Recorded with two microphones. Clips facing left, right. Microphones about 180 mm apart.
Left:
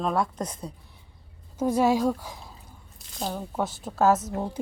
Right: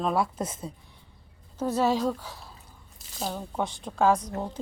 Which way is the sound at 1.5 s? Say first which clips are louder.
Left 3 dB; 10° left (ahead or behind).